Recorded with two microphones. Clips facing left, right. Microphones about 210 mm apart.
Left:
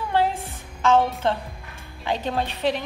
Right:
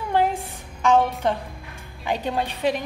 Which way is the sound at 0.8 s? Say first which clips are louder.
Even; 15° right (ahead or behind).